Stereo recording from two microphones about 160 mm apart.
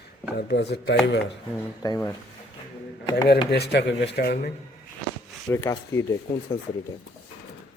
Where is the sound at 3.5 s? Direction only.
90° left.